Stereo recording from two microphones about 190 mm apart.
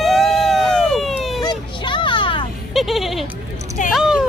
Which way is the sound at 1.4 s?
25° left (ahead or behind).